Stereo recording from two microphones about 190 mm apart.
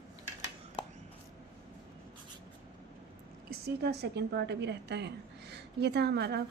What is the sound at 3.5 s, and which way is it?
A woman's voice, 60° right (ahead or behind).